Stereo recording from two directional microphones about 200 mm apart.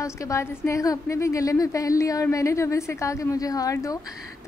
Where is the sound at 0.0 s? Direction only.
15° left (ahead or behind).